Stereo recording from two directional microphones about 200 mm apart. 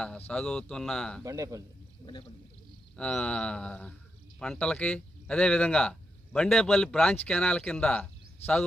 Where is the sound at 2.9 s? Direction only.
5° left (ahead or behind).